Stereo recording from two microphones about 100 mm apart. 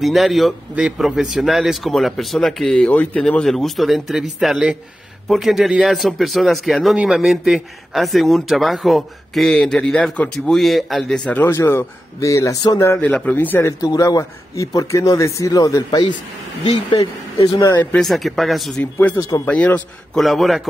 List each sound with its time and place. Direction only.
0.0 s a man's voice: centre (ahead or behind); by 13.0 s 30° left (ahead or behind)
13.0 s a man's voice: 15° left (ahead or behind); by 16.1 s 40° left (ahead or behind)
18.0 s a man's voice: centre (ahead or behind)
18.8 s speech: 15° left (ahead or behind)
19.1 s a man's voice: 40° left (ahead or behind)
19.4 s speech: 15° left (ahead or behind)
20.2 s a man's voice: centre (ahead or behind)